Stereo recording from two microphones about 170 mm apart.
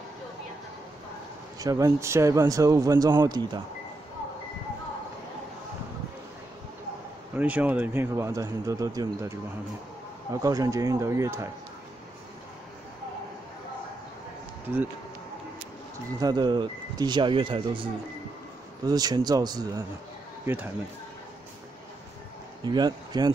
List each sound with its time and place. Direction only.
1.6 s speech: 20° right (ahead or behind)
7.3 s speech: 10° right (ahead or behind)
10.3 s speech: 20° right (ahead or behind)
16.2 s speech: 25° right (ahead or behind)
18.9 s speech: 20° right (ahead or behind)
20.4 s speech: 10° right (ahead or behind)
22.7 s speech: 25° right (ahead or behind)